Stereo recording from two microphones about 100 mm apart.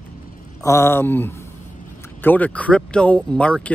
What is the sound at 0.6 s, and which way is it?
Speech, 30° left (ahead or behind).